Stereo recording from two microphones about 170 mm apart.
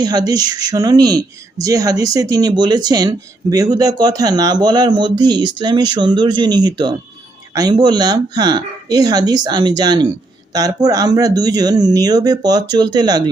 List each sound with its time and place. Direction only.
0.0 s speech: 25° right (ahead or behind)